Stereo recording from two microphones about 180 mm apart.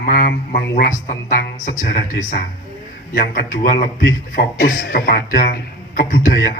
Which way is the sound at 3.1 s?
50° left (ahead or behind).